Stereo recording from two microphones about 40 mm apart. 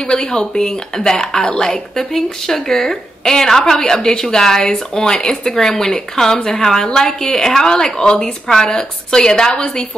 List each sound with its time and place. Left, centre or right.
0.0 s a woman's voice: centre